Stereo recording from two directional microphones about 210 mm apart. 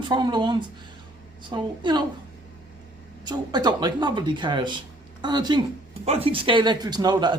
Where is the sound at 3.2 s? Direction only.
20° right (ahead or behind).